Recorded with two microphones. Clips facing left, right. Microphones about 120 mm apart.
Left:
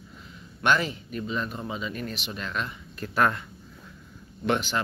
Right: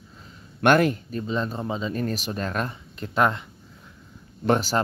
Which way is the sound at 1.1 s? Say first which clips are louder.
Right 4 dB; 30° right (ahead or behind).